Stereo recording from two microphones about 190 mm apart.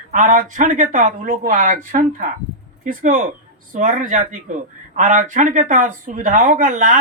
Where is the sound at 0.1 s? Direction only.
40° right (ahead or behind).